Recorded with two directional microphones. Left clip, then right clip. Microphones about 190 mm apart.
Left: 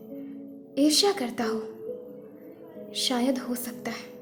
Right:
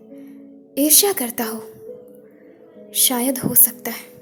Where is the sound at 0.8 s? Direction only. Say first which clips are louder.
Right 4 dB; 35° right (ahead or behind).